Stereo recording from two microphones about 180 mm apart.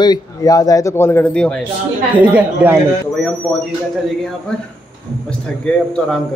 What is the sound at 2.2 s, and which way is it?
Speech, 10° right (ahead or behind).